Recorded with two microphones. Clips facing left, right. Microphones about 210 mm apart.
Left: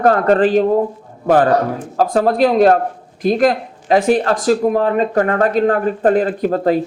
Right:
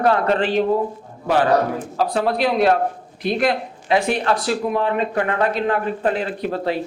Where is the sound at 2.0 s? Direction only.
45° left (ahead or behind).